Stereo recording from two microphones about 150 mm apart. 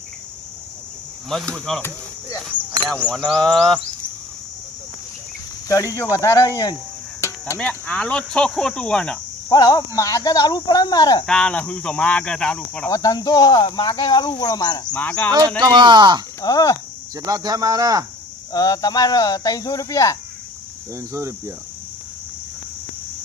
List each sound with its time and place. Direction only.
1.3 s speech: centre (ahead or behind)
2.9 s speech: 5° left (ahead or behind)
5.6 s speech: 20° left (ahead or behind); by 9.1 s 5° left (ahead or behind)
9.5 s speech: 25° left (ahead or behind)
11.3 s speech: 5° left (ahead or behind)
12.9 s speech: 25° left (ahead or behind)
14.9 s speech: 10° left (ahead or behind)
15.3 s speech: 25° right (ahead or behind)
16.4 s speech: 25° left (ahead or behind)
17.2 s speech: 25° right (ahead or behind)
18.5 s speech: 25° left (ahead or behind)
20.9 s speech: 20° right (ahead or behind)